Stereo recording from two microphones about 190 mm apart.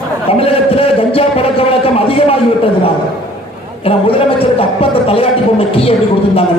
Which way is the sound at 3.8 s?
30° left (ahead or behind).